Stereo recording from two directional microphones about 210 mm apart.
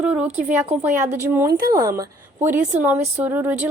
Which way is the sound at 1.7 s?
15° right (ahead or behind).